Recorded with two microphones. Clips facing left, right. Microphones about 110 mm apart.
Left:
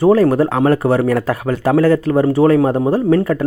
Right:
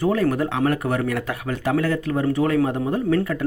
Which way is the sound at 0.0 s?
35° left (ahead or behind).